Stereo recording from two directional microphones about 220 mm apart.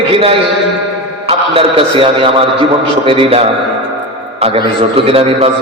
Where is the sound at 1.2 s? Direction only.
25° right (ahead or behind).